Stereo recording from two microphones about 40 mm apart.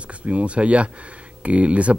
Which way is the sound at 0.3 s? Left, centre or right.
Right.